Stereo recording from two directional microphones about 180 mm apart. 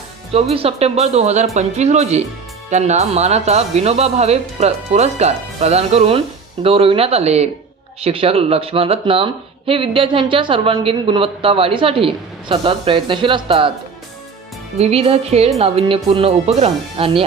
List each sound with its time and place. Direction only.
0.5 s speech: 35° right (ahead or behind)
14.8 s speech: 35° right (ahead or behind)